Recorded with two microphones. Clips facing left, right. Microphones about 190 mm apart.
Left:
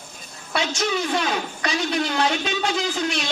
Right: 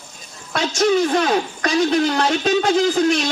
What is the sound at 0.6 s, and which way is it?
A woman's voice, 45° right (ahead or behind).